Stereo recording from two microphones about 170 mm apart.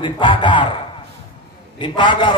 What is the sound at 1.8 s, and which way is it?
Speech, 30° left (ahead or behind).